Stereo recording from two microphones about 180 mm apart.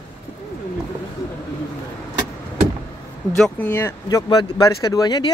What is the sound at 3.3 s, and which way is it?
Speech, 5° left (ahead or behind).